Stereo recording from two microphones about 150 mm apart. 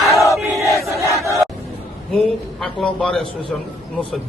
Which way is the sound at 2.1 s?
Centre (ahead or behind).